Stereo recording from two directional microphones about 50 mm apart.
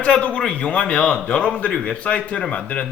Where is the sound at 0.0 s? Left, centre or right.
Left.